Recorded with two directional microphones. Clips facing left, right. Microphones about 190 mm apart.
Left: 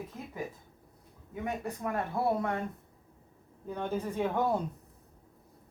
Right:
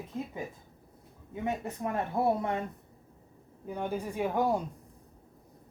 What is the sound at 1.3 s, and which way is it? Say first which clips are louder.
Speech: right 2 dB; 25° right (ahead or behind).